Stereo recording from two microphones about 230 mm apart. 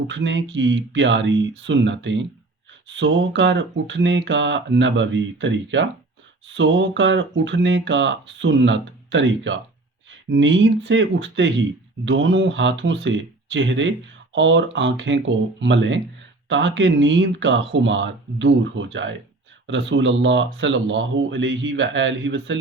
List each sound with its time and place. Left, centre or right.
0.1 s speech: right